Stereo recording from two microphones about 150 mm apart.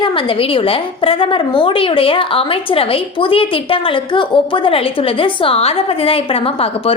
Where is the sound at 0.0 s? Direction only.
35° left (ahead or behind).